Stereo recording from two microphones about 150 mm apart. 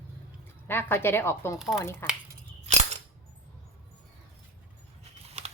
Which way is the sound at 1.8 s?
15° left (ahead or behind).